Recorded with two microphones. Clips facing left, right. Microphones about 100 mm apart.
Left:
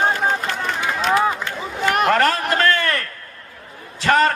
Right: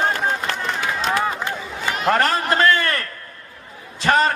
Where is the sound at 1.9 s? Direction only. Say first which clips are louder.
Left 3 dB; 60° left (ahead or behind).